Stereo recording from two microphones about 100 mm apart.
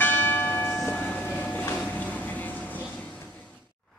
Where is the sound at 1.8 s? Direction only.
15° left (ahead or behind).